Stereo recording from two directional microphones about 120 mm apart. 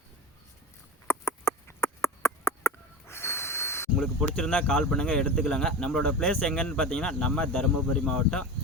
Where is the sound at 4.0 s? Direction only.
5° left (ahead or behind).